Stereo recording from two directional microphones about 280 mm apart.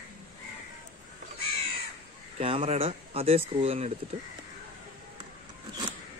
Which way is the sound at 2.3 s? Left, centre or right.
Right.